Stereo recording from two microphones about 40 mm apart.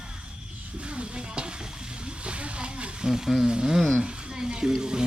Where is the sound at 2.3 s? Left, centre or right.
Right.